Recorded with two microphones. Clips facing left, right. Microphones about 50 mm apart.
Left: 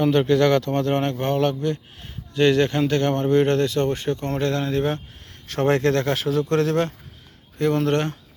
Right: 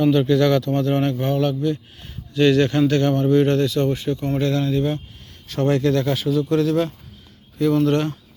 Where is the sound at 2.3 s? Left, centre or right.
Left.